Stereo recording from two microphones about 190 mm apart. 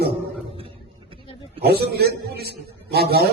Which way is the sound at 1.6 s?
55° right (ahead or behind).